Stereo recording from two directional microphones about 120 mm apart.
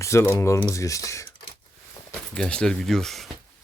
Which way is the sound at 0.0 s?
20° left (ahead or behind).